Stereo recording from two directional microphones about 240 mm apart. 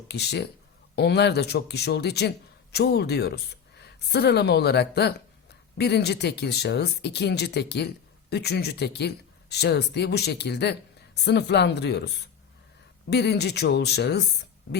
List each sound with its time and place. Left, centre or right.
0.1 s speech: left